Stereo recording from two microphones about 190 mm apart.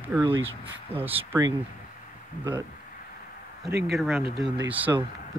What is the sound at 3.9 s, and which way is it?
Speech, centre (ahead or behind).